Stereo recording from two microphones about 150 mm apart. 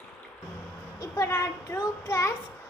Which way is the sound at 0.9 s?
25° left (ahead or behind).